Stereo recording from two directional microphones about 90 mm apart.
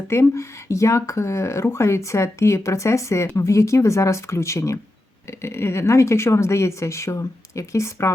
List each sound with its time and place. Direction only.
0.1 s speech: 30° left (ahead or behind)